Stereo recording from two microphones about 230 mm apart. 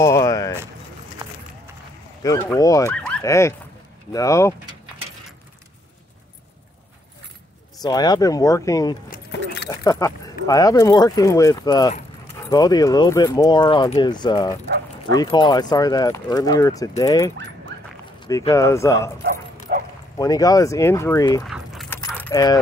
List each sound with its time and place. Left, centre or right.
0.0 s speech: centre
2.2 s speech: centre
7.8 s speech: centre
17.7 s dog: right
18.2 s speech: centre
19.7 s bow-wow: right
20.2 s speech: centre
21.5 s keys jangling: centre
22.2 s speech: centre